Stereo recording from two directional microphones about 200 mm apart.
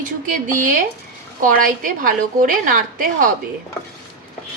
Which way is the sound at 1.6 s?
45° right (ahead or behind).